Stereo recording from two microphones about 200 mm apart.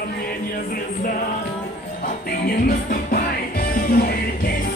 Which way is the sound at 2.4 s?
45° left (ahead or behind).